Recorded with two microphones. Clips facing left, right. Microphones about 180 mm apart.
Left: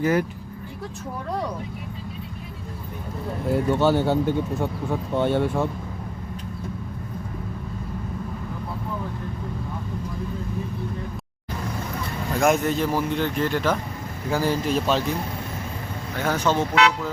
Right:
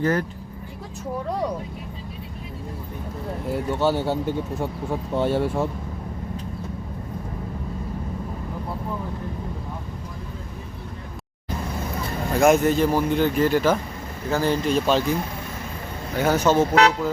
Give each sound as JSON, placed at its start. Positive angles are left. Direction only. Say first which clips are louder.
{"t": 0.0, "sound": "speech", "louder": "left 1 dB", "side_deg": 10}
{"t": 3.5, "sound": "speech", "louder": "left 3 dB", "side_deg": -10}
{"t": 12.4, "sound": "a man's voice", "louder": "right 4 dB", "side_deg": 0}
{"t": 14.3, "sound": "a man's voice", "louder": "right 1 dB", "side_deg": 10}
{"t": 16.1, "sound": "speech", "louder": "right 4 dB", "side_deg": -10}
{"t": 16.6, "sound": "speech", "louder": "right 3 dB", "side_deg": -40}